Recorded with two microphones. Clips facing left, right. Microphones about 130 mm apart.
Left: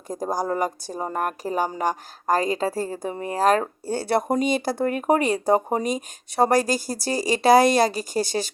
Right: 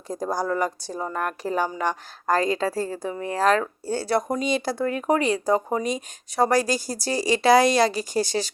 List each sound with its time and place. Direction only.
0.1 s a woman's voice: 45° left (ahead or behind)